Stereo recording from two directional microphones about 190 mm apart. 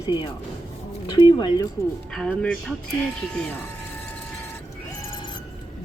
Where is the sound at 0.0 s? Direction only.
20° left (ahead or behind).